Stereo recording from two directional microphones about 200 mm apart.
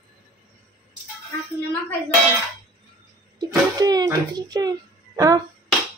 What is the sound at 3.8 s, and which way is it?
A child's voice, 20° right (ahead or behind).